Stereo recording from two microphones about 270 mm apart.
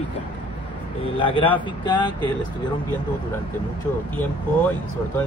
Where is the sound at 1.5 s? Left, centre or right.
Centre.